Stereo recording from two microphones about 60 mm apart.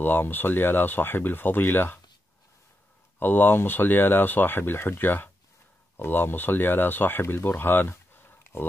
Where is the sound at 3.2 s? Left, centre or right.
Left.